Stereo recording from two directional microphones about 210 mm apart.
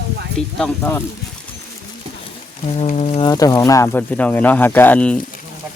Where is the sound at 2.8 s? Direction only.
30° left (ahead or behind).